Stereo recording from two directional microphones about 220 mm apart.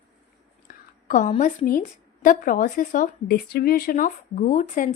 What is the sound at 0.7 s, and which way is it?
A woman's voice, 35° left (ahead or behind).